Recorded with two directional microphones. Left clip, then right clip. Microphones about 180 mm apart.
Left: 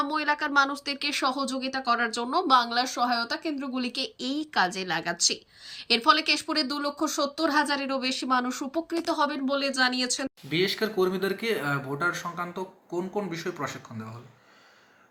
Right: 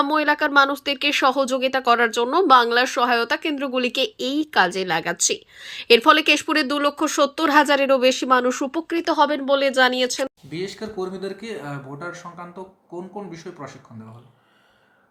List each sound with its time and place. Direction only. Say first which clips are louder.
0.0 s a woman's voice: right 7 dB; 25° right (ahead or behind)
10.5 s speech: left 4 dB; centre (ahead or behind)